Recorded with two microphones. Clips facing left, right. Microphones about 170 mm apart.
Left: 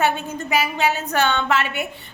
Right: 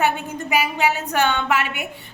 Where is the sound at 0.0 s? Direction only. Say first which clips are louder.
Even; 15° right (ahead or behind).